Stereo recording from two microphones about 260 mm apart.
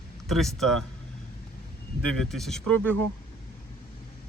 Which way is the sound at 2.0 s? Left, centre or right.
Centre.